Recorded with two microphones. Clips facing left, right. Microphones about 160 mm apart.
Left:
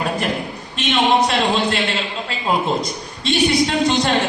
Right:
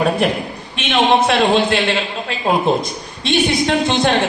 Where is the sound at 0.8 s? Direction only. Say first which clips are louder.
Right 2 dB; 60° right (ahead or behind).